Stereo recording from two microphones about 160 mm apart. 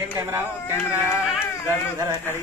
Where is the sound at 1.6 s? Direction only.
20° right (ahead or behind).